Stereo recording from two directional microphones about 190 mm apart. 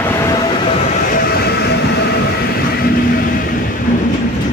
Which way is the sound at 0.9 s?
50° left (ahead or behind).